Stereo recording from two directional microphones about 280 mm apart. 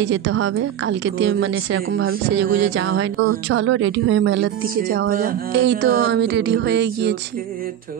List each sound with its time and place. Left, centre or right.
0.0 s a woman's voice: right